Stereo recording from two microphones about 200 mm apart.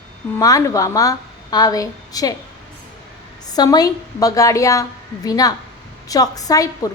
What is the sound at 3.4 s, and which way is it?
A woman's voice, 20° left (ahead or behind).